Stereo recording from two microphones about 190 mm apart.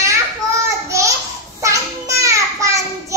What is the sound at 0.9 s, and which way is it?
Babbling, 15° right (ahead or behind).